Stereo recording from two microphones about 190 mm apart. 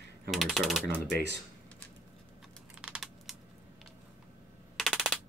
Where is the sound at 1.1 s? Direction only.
65° right (ahead or behind).